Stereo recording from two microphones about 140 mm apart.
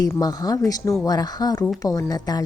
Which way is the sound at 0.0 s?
25° left (ahead or behind).